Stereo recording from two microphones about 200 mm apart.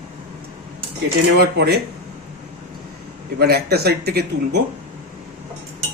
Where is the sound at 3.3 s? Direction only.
50° right (ahead or behind).